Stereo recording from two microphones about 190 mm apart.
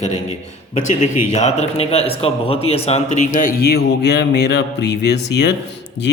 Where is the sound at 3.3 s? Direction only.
50° left (ahead or behind).